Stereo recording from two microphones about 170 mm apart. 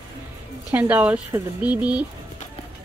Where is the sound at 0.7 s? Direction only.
10° right (ahead or behind).